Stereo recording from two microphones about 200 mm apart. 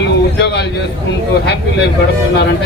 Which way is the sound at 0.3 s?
60° left (ahead or behind).